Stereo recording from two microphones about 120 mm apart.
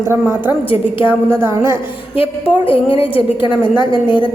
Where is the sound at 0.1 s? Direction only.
20° right (ahead or behind).